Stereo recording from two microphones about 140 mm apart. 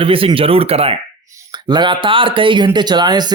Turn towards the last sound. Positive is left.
turn(degrees=-30)  # may be behind; listen again after turning